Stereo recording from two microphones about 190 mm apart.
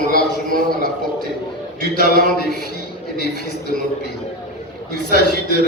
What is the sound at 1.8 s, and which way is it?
Speech, 60° left (ahead or behind).